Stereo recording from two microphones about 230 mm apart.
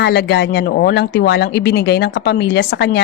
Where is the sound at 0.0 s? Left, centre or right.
Left.